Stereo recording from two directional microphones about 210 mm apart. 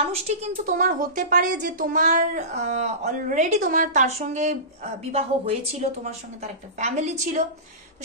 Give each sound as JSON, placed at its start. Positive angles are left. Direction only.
{"t": 0.1, "sound": "a woman's voice", "side_deg": -35}